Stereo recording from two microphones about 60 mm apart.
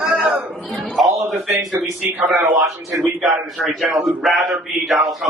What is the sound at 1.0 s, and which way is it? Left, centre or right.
Speech, centre.